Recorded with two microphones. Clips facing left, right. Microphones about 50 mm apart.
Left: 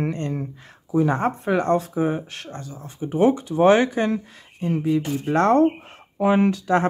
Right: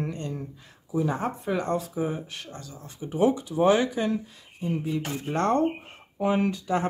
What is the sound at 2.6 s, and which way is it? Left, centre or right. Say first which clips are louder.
Speech: left 7 dB; left.